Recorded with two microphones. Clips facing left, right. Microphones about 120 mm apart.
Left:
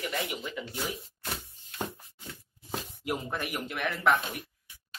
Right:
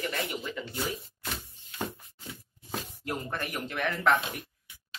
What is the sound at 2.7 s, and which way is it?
Speech, 5° left (ahead or behind).